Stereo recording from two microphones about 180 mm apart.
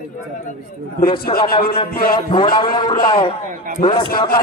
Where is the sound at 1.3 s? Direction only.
30° left (ahead or behind).